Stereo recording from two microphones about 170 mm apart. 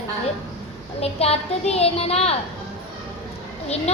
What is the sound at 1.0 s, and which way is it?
A woman's voice, 35° left (ahead or behind).